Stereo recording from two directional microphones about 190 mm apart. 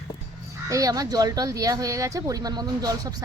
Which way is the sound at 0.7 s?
20° right (ahead or behind).